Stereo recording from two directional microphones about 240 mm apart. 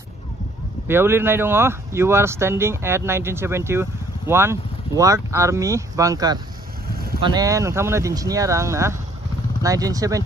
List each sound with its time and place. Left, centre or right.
0.8 s speech: centre
6.9 s vehicle: right
7.2 s speech: centre